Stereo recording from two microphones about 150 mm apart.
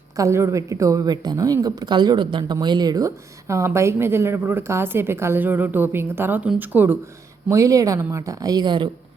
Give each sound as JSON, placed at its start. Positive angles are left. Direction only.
{"t": 0.2, "sound": "a woman's voice", "side_deg": -20}